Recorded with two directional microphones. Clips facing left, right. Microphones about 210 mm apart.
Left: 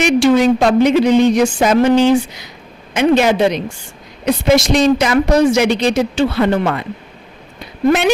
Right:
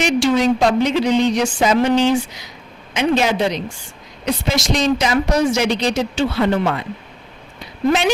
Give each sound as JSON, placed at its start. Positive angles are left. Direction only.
{"t": 0.0, "sound": "a woman's voice", "side_deg": 55}